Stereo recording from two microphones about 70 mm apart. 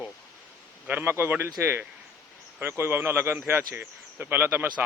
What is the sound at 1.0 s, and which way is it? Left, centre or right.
A man's voice, right.